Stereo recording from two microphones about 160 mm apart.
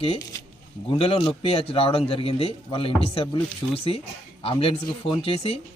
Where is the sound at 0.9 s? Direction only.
40° left (ahead or behind).